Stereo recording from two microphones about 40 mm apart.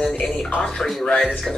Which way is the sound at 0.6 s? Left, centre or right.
Centre.